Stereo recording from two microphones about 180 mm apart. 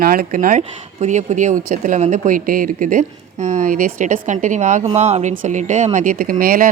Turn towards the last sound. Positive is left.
turn(degrees=-50)  # may be behind; listen again after turning